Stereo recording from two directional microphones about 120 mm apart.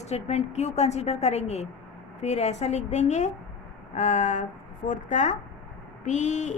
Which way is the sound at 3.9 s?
90° left.